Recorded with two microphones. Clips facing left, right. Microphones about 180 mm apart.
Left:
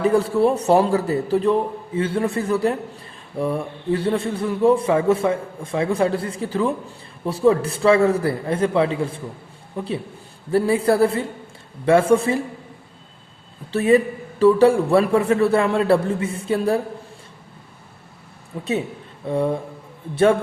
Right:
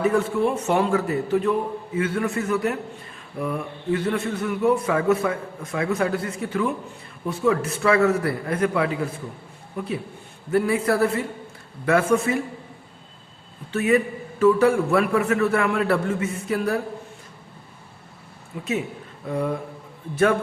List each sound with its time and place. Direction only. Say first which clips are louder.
0.0 s a man's voice: left 4 dB; 35° left (ahead or behind)
13.7 s a man's voice: left 4 dB; 35° left (ahead or behind)
18.5 s a man's voice: left 3 dB; 35° left (ahead or behind)